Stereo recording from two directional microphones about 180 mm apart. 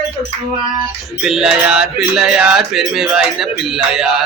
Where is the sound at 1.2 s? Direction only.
5° right (ahead or behind).